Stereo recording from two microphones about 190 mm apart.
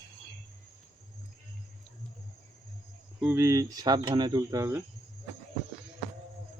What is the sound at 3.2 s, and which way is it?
Speech, 15° right (ahead or behind).